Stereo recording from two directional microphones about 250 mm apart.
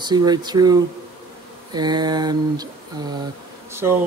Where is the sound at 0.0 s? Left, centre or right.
Centre.